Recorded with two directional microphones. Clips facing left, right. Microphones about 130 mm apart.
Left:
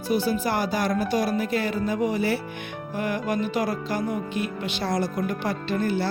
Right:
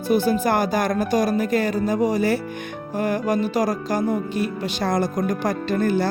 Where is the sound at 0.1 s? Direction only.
50° right (ahead or behind).